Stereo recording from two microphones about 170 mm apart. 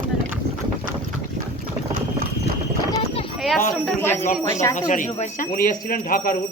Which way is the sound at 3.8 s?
10° left (ahead or behind).